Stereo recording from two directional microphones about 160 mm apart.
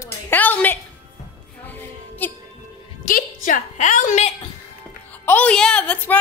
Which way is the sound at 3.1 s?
60° left (ahead or behind).